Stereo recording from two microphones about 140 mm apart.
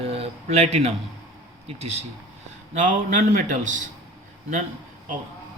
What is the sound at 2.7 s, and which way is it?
A man's voice, 65° right (ahead or behind).